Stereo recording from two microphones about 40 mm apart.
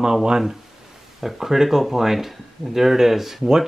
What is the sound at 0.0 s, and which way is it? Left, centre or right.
Speech, centre.